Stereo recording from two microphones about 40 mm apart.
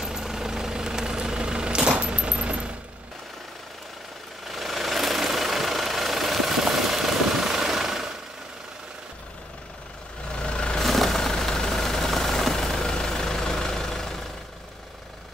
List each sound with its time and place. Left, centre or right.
0.0 s vehicle: centre; by 2.7 s right
4.5 s vehicle: centre
10.3 s vehicle: left
10.8 s vehicle: centre